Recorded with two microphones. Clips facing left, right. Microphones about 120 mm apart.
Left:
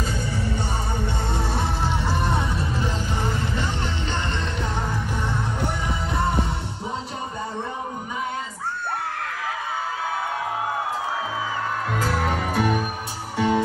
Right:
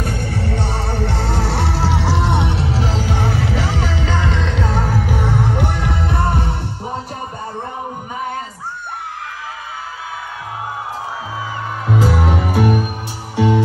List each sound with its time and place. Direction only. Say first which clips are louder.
0.0 s music: right 4 dB; 65° right (ahead or behind)
12.0 s music: right 7 dB; 10° right (ahead or behind)